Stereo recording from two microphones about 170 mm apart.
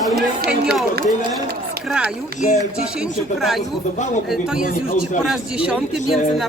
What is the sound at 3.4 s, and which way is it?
A man's voice, centre (ahead or behind).